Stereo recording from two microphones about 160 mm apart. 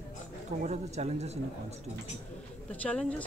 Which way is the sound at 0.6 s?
45° right (ahead or behind).